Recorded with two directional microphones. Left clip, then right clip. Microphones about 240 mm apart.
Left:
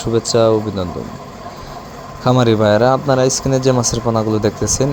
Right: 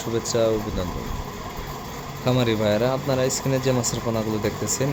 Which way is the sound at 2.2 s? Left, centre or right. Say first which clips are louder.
Left 9 dB; left.